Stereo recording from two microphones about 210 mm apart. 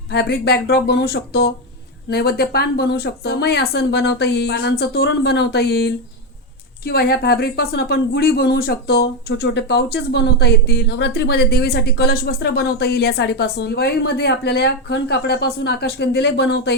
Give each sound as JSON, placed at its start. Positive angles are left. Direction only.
{"t": 0.1, "sound": "speech", "side_deg": 50}